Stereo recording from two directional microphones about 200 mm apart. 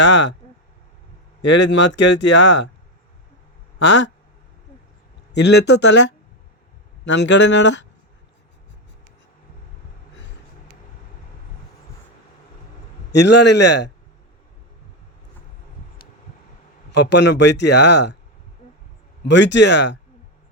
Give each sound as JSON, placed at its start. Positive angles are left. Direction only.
{"t": 0.0, "sound": "speech", "side_deg": 65}
{"t": 1.4, "sound": "speech", "side_deg": 65}
{"t": 3.8, "sound": "speech", "side_deg": 65}
{"t": 5.3, "sound": "speech", "side_deg": 60}
{"t": 13.1, "sound": "speech", "side_deg": 60}
{"t": 16.9, "sound": "speech", "side_deg": 60}
{"t": 19.2, "sound": "speech", "side_deg": 60}